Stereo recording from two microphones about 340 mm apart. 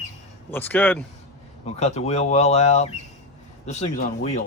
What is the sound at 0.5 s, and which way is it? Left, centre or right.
Speech, centre.